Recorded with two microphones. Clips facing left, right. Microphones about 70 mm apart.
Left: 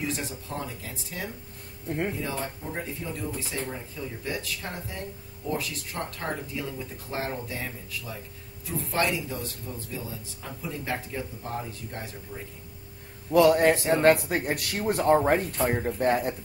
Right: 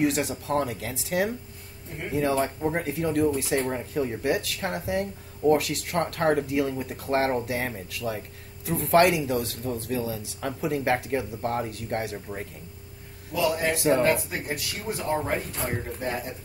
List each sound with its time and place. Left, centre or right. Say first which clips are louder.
0.0 s speech: right 8 dB; right
2.1 s speech: right 8 dB; right
13.3 s speech: left 6 dB; left
13.7 s speech: right 3 dB; right
14.3 s speech: left 4 dB; left